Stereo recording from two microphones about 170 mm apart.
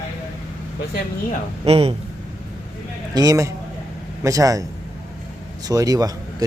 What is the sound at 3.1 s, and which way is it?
Speech, 20° right (ahead or behind).